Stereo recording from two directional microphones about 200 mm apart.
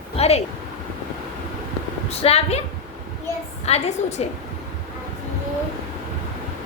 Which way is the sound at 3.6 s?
30° left (ahead or behind).